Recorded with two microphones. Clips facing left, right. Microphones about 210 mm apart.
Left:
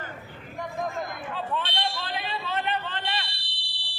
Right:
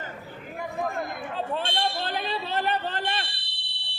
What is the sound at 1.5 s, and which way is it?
Fire alarm, 45° right (ahead or behind).